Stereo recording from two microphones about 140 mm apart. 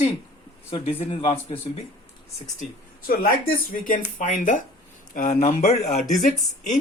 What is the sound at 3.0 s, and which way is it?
Speech, 90° left.